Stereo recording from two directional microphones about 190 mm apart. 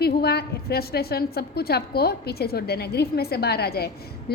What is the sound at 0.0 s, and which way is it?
A woman's voice, 55° left (ahead or behind).